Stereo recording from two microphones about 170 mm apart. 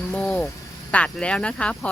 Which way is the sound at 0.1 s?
5° left (ahead or behind).